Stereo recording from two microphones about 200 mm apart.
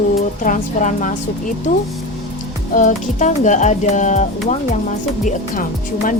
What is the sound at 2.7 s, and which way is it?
Speech, 40° left (ahead or behind).